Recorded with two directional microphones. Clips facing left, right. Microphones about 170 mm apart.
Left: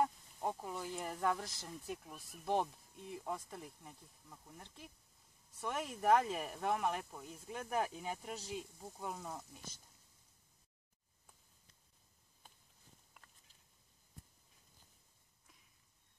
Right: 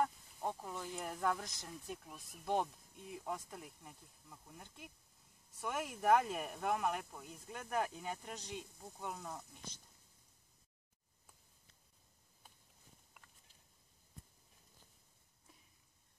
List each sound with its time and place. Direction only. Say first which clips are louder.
0.0 s speech: left 1 dB; 10° left (ahead or behind)